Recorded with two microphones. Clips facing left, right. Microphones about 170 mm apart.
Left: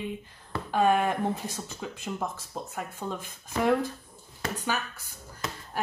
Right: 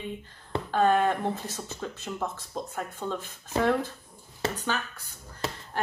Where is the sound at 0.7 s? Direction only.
10° left (ahead or behind).